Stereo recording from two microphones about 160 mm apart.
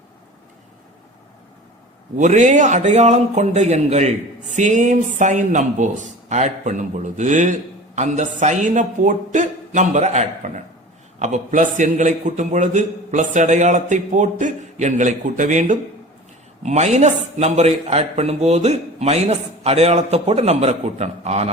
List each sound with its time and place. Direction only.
2.1 s a man's voice: 50° right (ahead or behind)